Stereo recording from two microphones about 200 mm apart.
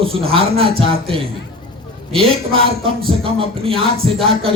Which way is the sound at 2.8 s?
30° right (ahead or behind).